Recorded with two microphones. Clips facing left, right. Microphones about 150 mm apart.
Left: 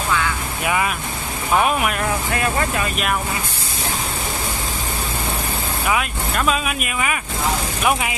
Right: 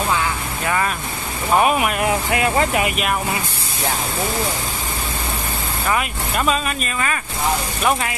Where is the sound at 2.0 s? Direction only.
20° right (ahead or behind).